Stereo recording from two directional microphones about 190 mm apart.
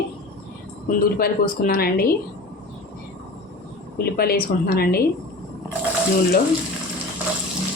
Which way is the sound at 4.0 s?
55° left (ahead or behind).